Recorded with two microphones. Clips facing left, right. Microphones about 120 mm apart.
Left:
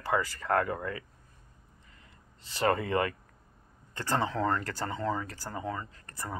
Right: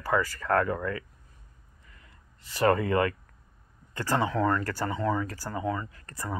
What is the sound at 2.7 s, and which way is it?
Speech, 25° left (ahead or behind).